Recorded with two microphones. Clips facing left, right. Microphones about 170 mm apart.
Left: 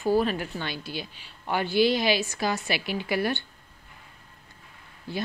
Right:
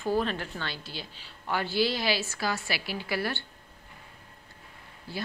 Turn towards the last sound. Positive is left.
turn(degrees=20)  # may be behind; listen again after turning